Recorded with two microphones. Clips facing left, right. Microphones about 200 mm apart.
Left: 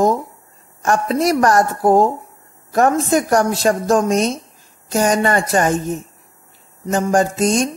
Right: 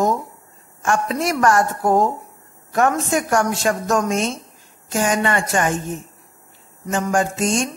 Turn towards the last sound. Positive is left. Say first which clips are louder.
# left 4 dB
turn(degrees=40)  # may be behind; listen again after turning